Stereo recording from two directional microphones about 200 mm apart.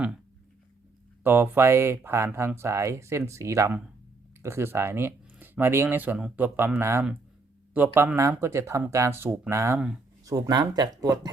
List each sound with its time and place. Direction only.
1.2 s speech: 10° right (ahead or behind)
9.7 s speech: 5° right (ahead or behind)
10.2 s speech: 15° right (ahead or behind)